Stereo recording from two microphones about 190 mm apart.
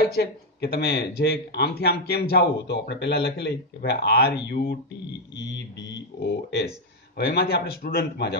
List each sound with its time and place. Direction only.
0.0 s speech: 55° left (ahead or behind)
5.3 s speech: 65° left (ahead or behind)